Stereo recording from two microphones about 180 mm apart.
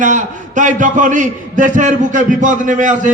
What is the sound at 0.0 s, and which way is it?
A man's voice, 45° right (ahead or behind).